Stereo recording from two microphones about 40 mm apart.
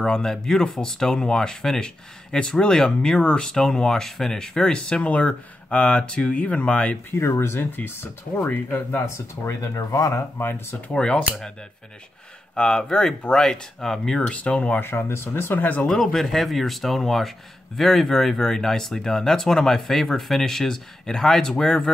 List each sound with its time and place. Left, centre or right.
0.0 s speech: centre; by 7.0 s left
7.1 s speech: left
7.7 s speech: left
10.9 s speech: left
12.5 s speech: left
14.1 s speech: left
14.8 s speech: left
15.6 s speech: left
15.9 s speech: centre